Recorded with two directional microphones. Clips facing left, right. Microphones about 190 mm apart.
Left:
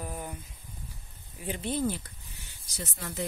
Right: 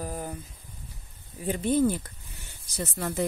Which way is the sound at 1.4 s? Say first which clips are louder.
Right 7 dB; 45° right (ahead or behind).